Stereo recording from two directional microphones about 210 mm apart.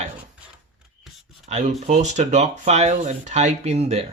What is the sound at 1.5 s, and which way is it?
Speech, 35° right (ahead or behind).